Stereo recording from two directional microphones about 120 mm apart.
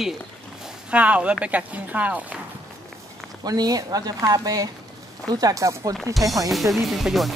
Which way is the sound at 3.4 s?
30° right (ahead or behind).